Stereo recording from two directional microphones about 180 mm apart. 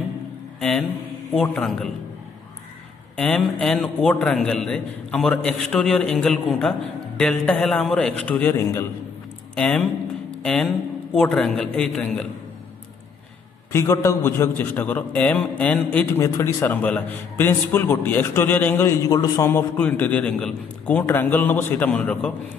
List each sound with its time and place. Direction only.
0.6 s a man's voice: 5° left (ahead or behind)
3.2 s a man's voice: 5° left (ahead or behind)
13.7 s a man's voice: 15° left (ahead or behind)